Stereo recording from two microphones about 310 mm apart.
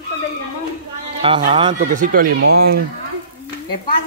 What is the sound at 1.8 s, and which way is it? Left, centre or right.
Speech, right.